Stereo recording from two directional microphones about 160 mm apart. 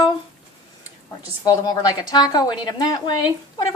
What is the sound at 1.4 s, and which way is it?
A woman's voice, 25° left (ahead or behind).